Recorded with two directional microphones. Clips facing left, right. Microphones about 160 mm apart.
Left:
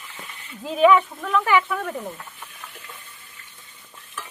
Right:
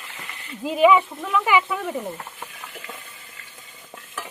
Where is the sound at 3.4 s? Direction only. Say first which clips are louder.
Right 3 dB; 90° right.